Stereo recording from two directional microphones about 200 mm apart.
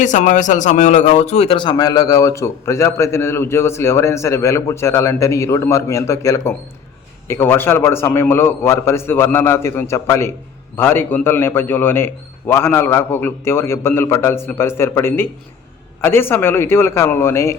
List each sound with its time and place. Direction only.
0.0 s a man's voice: 40° left (ahead or behind); by 17.6 s 15° left (ahead or behind)